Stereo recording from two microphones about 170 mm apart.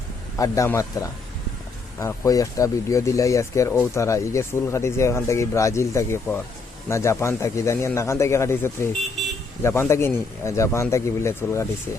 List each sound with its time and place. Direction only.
0.3 s a man's voice: 20° left (ahead or behind)